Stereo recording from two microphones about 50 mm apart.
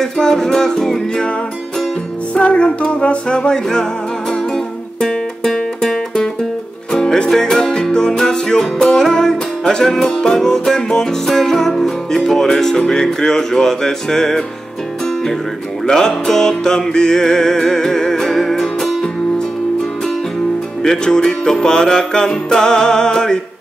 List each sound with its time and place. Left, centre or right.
0.0 s music: centre
2.3 s music: left
5.0 s music: centre
15.9 s music: centre
20.8 s music: centre